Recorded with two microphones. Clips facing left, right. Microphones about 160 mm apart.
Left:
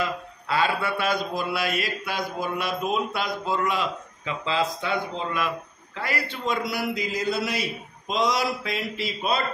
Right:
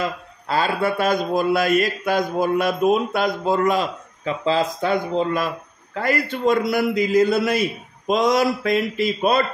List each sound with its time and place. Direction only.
0.0 s mantra: 40° right (ahead or behind)